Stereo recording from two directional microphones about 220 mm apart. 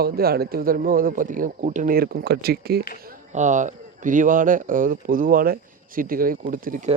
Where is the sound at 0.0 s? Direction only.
45° right (ahead or behind).